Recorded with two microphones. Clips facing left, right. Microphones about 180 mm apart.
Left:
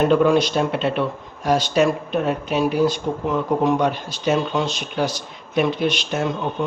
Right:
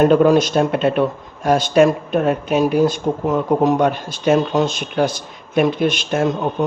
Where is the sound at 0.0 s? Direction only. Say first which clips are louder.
Right 4 dB; 45° right (ahead or behind).